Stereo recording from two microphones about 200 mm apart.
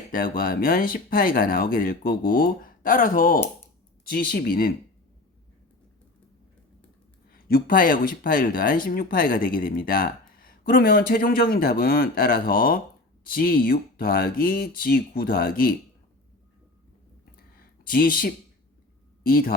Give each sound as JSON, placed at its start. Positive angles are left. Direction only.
{"t": 0.1, "sound": "speech", "side_deg": 45}
{"t": 7.3, "sound": "speech", "side_deg": 45}
{"t": 17.6, "sound": "a sound", "side_deg": 45}
{"t": 19.2, "sound": "speech", "side_deg": 45}